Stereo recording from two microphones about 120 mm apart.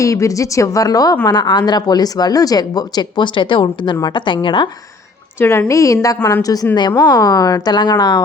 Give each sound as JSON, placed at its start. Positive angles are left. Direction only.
{"t": 0.0, "sound": "a woman's voice", "side_deg": 25}
{"t": 5.4, "sound": "a woman's voice", "side_deg": 20}